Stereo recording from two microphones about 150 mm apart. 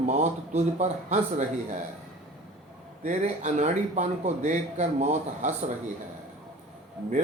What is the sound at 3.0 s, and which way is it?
A man's voice, 45° right (ahead or behind).